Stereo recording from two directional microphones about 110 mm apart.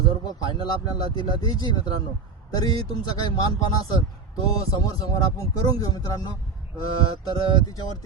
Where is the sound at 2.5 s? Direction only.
35° left (ahead or behind).